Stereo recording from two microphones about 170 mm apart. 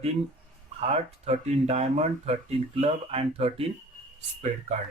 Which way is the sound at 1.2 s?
40° right (ahead or behind).